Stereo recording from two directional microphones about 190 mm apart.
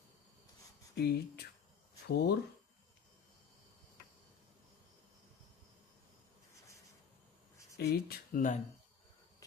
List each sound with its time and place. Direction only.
0.9 s speech: 55° left (ahead or behind)
7.8 s speech: 55° left (ahead or behind)